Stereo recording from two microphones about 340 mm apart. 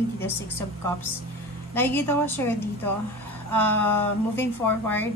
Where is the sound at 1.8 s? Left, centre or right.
Centre.